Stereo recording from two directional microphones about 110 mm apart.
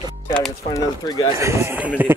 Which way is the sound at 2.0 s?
15° right (ahead or behind).